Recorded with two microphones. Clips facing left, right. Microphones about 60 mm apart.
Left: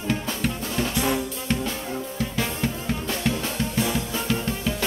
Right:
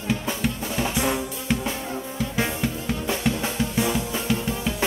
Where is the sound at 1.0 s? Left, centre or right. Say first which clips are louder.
Even; centre.